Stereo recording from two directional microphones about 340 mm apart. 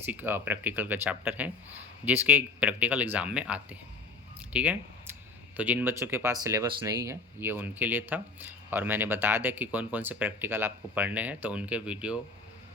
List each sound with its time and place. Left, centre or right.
0.0 s speech: centre